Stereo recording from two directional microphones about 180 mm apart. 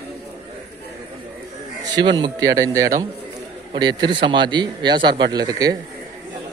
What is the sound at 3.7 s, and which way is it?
A man's voice, 25° right (ahead or behind).